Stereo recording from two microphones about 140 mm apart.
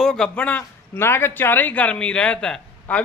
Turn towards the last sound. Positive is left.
turn(degrees=5)  # may be behind; listen again after turning